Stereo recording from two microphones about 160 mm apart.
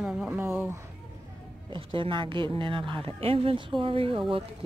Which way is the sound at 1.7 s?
30° right (ahead or behind).